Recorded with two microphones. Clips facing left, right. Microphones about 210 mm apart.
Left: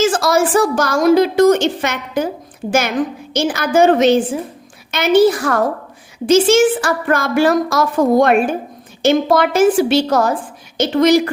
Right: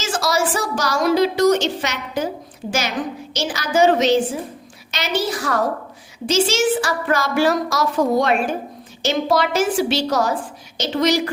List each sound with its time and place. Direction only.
0.0 s a woman's voice: 55° left (ahead or behind)